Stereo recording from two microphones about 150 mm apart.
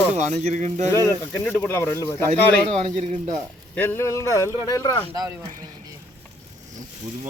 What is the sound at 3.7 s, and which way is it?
Speech, 15° left (ahead or behind).